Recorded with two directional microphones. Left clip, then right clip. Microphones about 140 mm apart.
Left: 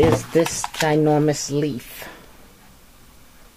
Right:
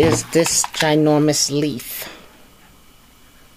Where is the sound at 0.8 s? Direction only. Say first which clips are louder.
Right 2 dB; 30° right (ahead or behind).